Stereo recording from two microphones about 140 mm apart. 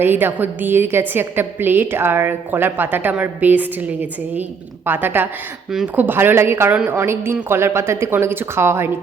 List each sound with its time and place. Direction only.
0.0 s a woman's voice: 15° right (ahead or behind)